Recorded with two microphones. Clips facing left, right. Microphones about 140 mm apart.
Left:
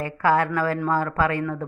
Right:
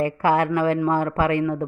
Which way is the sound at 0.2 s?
25° right (ahead or behind).